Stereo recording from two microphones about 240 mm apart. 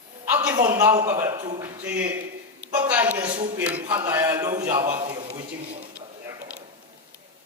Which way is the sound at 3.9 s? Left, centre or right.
Centre.